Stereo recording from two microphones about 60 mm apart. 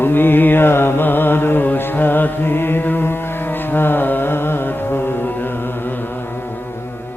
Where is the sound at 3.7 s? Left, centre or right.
Left.